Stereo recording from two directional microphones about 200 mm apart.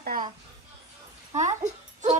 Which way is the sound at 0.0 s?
45° right (ahead or behind).